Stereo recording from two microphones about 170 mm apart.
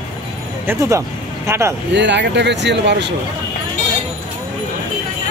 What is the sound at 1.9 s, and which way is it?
Speech, 90° right.